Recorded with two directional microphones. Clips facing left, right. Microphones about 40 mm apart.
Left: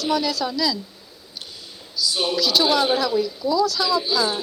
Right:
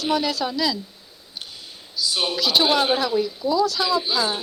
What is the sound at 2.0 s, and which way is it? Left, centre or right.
Speech, right.